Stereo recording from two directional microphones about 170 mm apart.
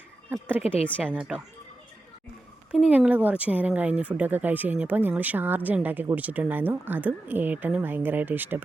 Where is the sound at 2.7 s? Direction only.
10° right (ahead or behind).